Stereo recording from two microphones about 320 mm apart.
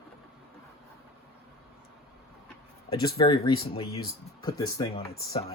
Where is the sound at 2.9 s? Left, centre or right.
Centre.